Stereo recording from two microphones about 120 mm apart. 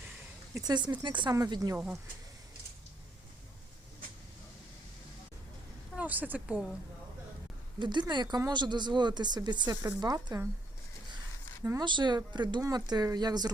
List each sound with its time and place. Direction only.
0.5 s speech: 35° right (ahead or behind)
6.0 s a woman's voice: 15° right (ahead or behind)
7.8 s speech: 40° right (ahead or behind)
11.8 s speech: 40° right (ahead or behind)